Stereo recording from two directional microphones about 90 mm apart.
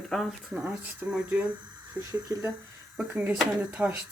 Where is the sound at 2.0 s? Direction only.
30° right (ahead or behind).